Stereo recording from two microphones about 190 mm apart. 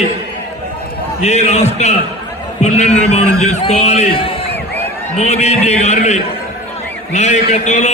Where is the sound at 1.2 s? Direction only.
35° left (ahead or behind).